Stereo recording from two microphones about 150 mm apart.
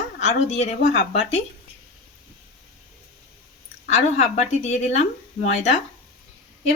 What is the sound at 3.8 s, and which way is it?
Speech, 50° left (ahead or behind).